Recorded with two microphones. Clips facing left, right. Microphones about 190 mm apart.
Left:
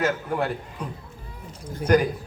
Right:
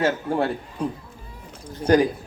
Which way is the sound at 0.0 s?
30° right (ahead or behind).